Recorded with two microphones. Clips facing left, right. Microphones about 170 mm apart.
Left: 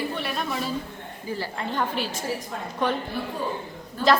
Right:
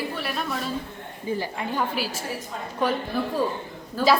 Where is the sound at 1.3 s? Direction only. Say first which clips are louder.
Even; 15° right (ahead or behind).